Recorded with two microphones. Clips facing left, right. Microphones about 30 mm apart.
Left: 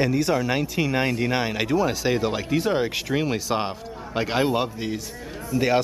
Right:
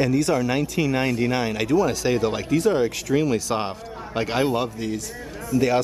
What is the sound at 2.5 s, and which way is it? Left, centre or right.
Speech, left.